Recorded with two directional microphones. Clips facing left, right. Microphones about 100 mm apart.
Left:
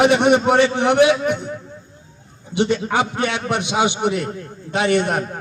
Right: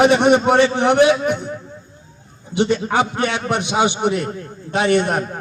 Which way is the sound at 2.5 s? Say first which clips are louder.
Right 1 dB; 35° right (ahead or behind).